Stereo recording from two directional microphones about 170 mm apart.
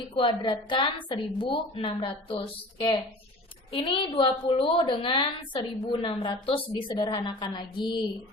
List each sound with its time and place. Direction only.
0.2 s a woman's voice: 30° left (ahead or behind)